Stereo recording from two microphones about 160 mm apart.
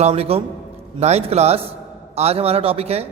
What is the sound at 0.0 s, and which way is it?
A man's voice, 40° right (ahead or behind).